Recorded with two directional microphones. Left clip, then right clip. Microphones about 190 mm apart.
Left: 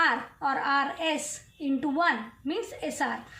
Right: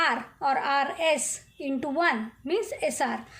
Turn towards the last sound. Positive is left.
turn(degrees=-50)  # may be behind; listen again after turning